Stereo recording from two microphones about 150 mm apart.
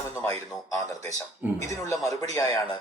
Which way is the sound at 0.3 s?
20° left (ahead or behind).